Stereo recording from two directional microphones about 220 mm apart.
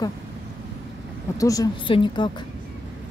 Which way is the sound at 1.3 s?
15° left (ahead or behind).